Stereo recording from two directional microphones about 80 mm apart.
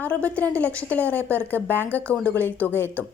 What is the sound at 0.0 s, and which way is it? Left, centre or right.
A woman's voice, centre.